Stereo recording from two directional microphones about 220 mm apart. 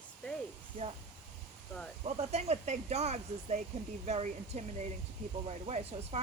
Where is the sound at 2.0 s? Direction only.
30° right (ahead or behind).